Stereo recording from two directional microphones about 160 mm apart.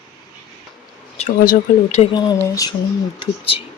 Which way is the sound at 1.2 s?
50° left (ahead or behind).